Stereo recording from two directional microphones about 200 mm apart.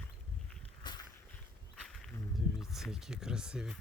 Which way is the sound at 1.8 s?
5° left (ahead or behind).